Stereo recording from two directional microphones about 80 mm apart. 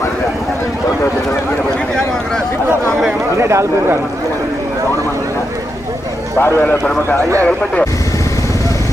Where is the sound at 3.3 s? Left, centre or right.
Right.